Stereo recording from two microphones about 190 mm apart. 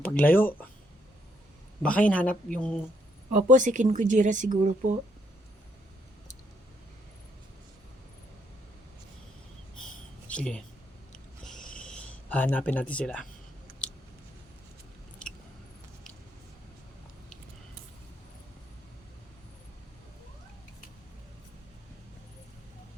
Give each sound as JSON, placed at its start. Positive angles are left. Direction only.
{"t": 0.0, "sound": "speech", "side_deg": 10}
{"t": 1.8, "sound": "speech", "side_deg": 5}
{"t": 3.3, "sound": "speech", "side_deg": -40}
{"t": 9.7, "sound": "a sound", "side_deg": 5}
{"t": 13.8, "sound": "scissors", "side_deg": 5}
{"t": 15.2, "sound": "chewing", "side_deg": 5}